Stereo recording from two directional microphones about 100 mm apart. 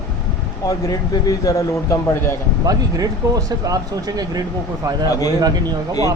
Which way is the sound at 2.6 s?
40° right (ahead or behind).